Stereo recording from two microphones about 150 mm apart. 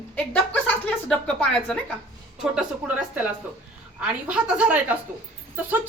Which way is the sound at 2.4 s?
5° right (ahead or behind).